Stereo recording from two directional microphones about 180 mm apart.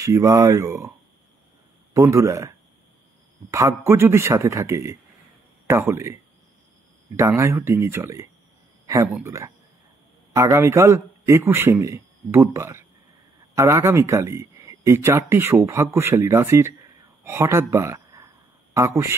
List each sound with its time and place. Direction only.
0.0 s speech: 15° right (ahead or behind)
2.0 s speech: 15° right (ahead or behind)
7.2 s speech: 15° right (ahead or behind)
17.2 s a sound: 15° right (ahead or behind)